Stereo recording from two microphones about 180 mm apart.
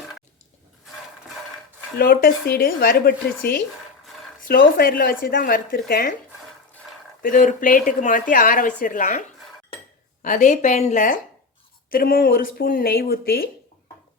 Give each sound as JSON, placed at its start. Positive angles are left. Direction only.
{"t": 2.0, "sound": "speech", "side_deg": 55}
{"t": 7.2, "sound": "speech", "side_deg": 50}
{"t": 10.2, "sound": "speech", "side_deg": 45}